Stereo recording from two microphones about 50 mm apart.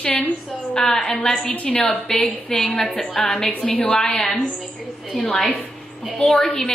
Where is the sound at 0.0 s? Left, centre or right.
Left.